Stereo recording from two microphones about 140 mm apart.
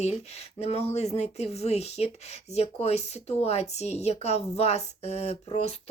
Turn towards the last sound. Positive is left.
turn(degrees=50)  # may be behind; listen again after turning